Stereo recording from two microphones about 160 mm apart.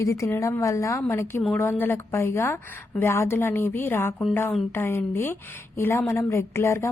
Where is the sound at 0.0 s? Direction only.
20° left (ahead or behind).